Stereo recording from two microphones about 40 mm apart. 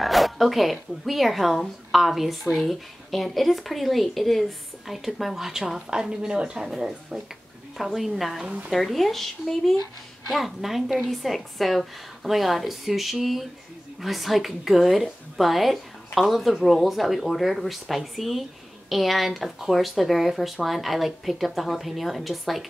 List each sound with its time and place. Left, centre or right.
0.0 s a woman's voice: centre
7.7 s a woman's voice: centre